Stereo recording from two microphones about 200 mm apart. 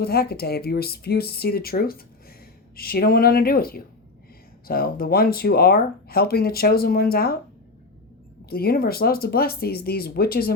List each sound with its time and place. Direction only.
0.0 s speech: 50° left (ahead or behind)
8.4 s speech: 50° left (ahead or behind)